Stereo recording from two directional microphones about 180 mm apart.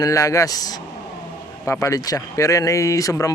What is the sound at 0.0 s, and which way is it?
Speech, 20° left (ahead or behind).